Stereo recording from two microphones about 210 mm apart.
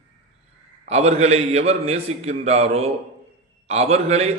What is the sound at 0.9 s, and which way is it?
A man's voice, 30° right (ahead or behind).